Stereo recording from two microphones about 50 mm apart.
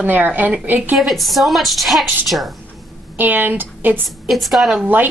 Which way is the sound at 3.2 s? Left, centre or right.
Right.